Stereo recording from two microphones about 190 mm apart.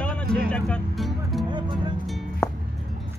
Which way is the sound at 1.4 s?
25° right (ahead or behind).